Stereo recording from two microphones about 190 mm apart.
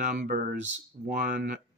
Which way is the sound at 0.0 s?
45° right (ahead or behind).